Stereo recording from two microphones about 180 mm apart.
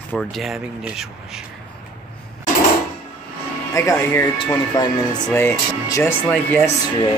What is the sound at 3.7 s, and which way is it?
Speech, 15° left (ahead or behind).